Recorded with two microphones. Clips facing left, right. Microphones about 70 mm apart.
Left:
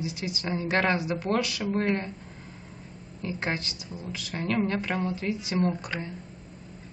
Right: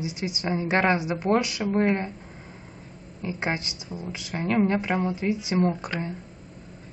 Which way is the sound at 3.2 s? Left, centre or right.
Centre.